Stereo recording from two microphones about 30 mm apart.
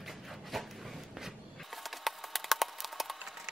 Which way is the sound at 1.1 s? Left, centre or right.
Centre.